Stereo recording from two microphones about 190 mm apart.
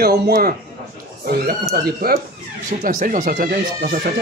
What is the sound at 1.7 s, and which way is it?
Speech, 55° right (ahead or behind).